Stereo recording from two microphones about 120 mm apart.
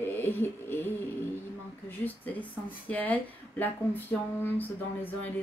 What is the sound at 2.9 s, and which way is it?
Speech, 15° left (ahead or behind).